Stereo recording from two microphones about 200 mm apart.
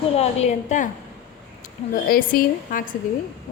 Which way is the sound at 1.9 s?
45° left (ahead or behind).